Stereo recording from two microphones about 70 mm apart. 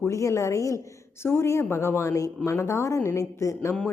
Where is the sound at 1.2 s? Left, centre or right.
Left.